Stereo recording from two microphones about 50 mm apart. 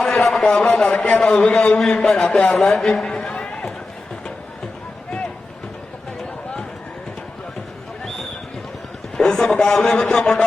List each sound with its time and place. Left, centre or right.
0.3 s a man's voice: centre
3.2 s run: left
9.1 s a man's voice: centre